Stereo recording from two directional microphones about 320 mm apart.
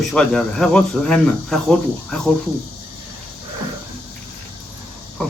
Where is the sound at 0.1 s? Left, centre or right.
Centre.